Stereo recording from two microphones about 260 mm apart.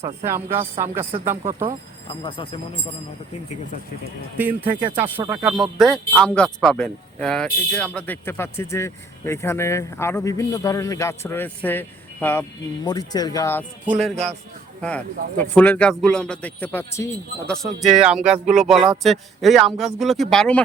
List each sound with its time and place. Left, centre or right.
0.3 s speech: centre
2.2 s speech: left
4.4 s speech: centre